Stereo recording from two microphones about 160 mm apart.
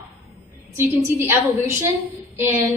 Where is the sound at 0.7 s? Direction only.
15° right (ahead or behind).